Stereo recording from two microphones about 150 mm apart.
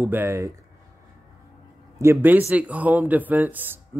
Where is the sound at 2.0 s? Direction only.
15° right (ahead or behind).